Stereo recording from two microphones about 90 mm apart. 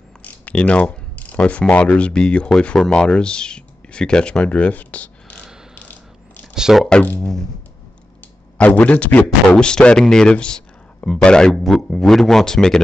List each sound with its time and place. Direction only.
0.2 s speech: 15° left (ahead or behind)
5.8 s mechanisms: 20° left (ahead or behind)
6.5 s speech: 5° right (ahead or behind)
6.9 s speech: 10° left (ahead or behind)
8.5 s speech: 15° left (ahead or behind)